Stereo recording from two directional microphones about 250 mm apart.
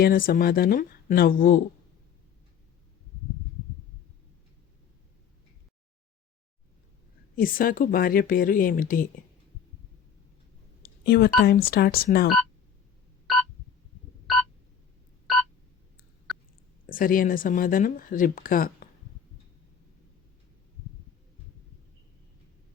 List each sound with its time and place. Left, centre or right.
0.0 s speech: left
7.3 s speech: left
11.0 s speech: left
16.3 s burping: centre
16.9 s speech: left